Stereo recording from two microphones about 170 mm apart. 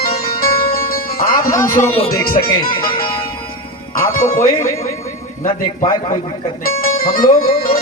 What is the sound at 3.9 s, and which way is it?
Speech, 55° left (ahead or behind).